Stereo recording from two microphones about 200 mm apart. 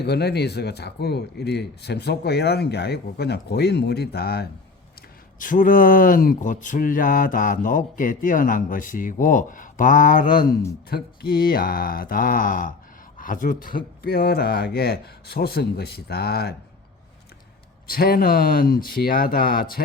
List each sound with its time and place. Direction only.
0.0 s speech: 55° left (ahead or behind)
5.4 s a man's voice: 40° left (ahead or behind)
17.8 s speech: 50° left (ahead or behind)